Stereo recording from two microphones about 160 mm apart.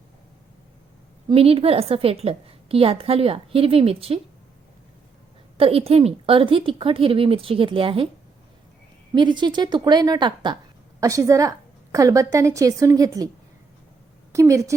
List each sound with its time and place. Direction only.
1.3 s a woman's voice: 35° right (ahead or behind)
5.5 s a woman's voice: 35° right (ahead or behind)
9.1 s a woman's voice: 30° right (ahead or behind)
14.3 s a woman's voice: 20° right (ahead or behind)